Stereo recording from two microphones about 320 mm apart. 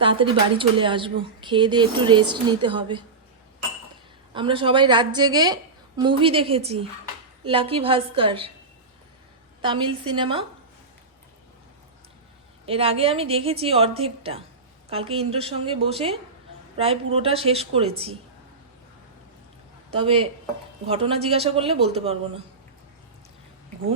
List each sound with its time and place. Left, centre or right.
0.0 s speech: centre
4.4 s speech: centre
9.6 s speech: centre
12.6 s speech: centre
20.0 s speech: centre